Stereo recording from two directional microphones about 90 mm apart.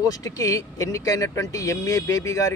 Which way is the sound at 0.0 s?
40° left (ahead or behind).